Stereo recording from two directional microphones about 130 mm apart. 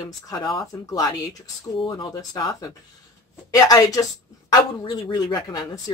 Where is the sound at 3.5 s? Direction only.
30° left (ahead or behind).